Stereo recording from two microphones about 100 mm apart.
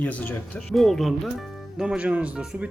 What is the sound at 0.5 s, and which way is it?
A man's voice, centre (ahead or behind).